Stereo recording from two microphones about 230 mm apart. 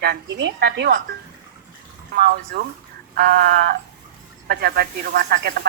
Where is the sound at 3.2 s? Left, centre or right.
Right.